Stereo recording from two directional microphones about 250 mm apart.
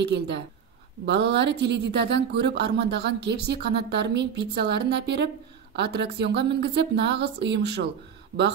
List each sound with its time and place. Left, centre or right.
0.0 s speech: right